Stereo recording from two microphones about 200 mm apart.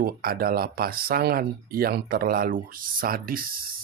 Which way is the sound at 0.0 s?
50° right (ahead or behind).